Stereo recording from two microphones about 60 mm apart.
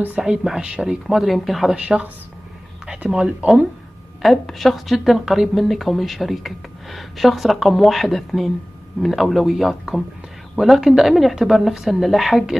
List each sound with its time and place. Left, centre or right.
0.2 s speech: centre
1.8 s speech: centre
3.1 s speech: centre
4.2 s speech: centre